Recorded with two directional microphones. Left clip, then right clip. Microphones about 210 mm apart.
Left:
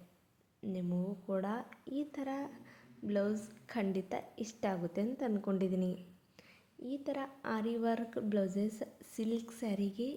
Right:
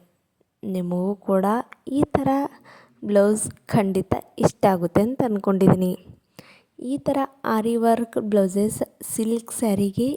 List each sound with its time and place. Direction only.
0.6 s a woman's voice: 50° right (ahead or behind)